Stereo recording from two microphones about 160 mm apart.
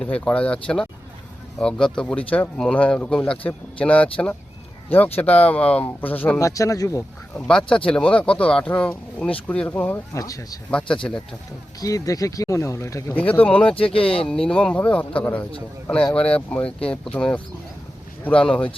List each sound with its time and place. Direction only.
0.0 s speech: 10° left (ahead or behind)
7.4 s speech: 5° left (ahead or behind); by 10.6 s 20° left (ahead or behind)
10.7 s speech: 5° left (ahead or behind)
11.8 s speech: 20° left (ahead or behind)
13.9 s speech: 35° left (ahead or behind)
14.3 s speech: 5° left (ahead or behind)